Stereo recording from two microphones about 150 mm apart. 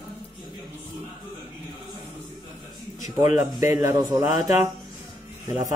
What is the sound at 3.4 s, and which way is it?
Speech, 25° right (ahead or behind).